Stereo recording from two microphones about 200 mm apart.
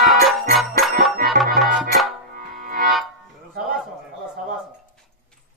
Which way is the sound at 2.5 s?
40° right (ahead or behind).